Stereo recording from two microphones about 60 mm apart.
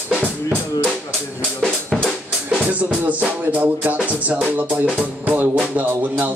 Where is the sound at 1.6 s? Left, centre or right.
Centre.